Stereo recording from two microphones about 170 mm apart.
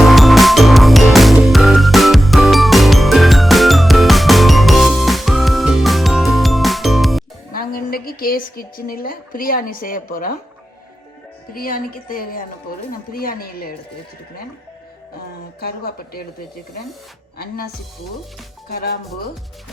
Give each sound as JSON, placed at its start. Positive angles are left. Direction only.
{"t": 0.0, "sound": "music", "side_deg": 0}
{"t": 7.5, "sound": "a woman's voice", "side_deg": 60}
{"t": 11.5, "sound": "speech", "side_deg": 60}
{"t": 15.6, "sound": "speech", "side_deg": 65}
{"t": 17.3, "sound": "speech", "side_deg": 65}
{"t": 18.7, "sound": "speech", "side_deg": 65}